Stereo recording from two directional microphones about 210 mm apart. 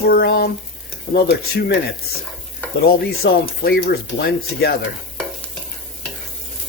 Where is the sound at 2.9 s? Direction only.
45° left (ahead or behind).